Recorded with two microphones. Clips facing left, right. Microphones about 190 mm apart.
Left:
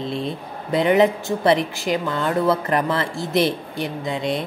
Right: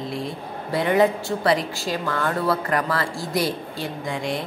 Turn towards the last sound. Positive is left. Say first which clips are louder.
# left 3 dB
turn(degrees=20)  # may be behind; listen again after turning